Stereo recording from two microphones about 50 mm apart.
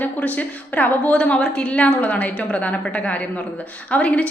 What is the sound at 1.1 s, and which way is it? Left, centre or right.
A woman's voice, left.